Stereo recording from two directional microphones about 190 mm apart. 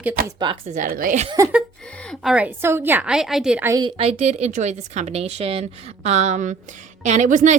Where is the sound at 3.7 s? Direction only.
25° right (ahead or behind).